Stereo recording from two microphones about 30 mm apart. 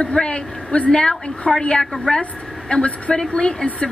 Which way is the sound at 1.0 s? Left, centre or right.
Left.